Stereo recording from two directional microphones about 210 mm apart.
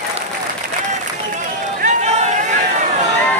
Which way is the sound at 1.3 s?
35° right (ahead or behind).